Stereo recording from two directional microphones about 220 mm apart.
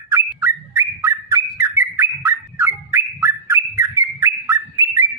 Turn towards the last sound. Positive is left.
turn(degrees=-15)  # may be behind; listen again after turning